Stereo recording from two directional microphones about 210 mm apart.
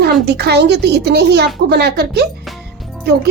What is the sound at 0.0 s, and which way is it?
A woman's voice, 50° right (ahead or behind).